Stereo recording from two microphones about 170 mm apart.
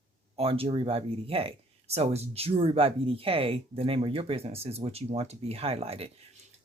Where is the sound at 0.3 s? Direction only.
35° right (ahead or behind).